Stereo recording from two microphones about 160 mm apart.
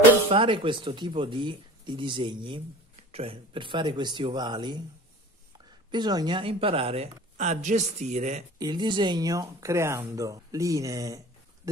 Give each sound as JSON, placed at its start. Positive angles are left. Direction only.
{"t": 0.3, "sound": "speech", "side_deg": -35}
{"t": 5.9, "sound": "speech", "side_deg": -25}
{"t": 8.5, "sound": "speech", "side_deg": -25}